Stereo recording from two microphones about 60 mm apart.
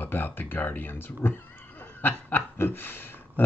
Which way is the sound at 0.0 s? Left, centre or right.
Left.